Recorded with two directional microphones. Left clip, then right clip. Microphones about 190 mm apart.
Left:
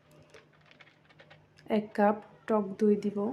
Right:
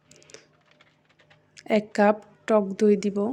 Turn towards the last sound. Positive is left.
turn(degrees=-25)  # may be behind; listen again after turning